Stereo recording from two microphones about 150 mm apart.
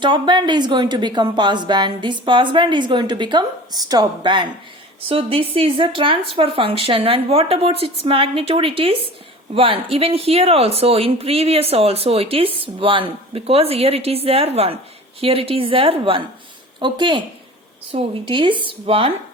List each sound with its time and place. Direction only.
0.0 s speech: 30° right (ahead or behind)